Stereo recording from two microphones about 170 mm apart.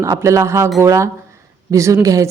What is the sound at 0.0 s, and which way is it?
A woman's voice, 15° right (ahead or behind).